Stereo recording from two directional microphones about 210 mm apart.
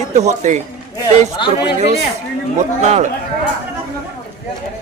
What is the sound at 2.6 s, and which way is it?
Speech, 35° right (ahead or behind).